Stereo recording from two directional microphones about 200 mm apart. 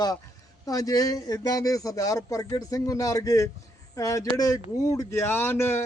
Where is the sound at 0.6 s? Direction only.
15° left (ahead or behind).